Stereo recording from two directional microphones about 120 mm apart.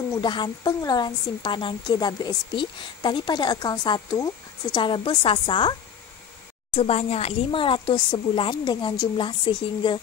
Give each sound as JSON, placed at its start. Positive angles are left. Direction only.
{"t": 0.1, "sound": "a woman's voice", "side_deg": 40}
{"t": 6.7, "sound": "a woman's voice", "side_deg": 55}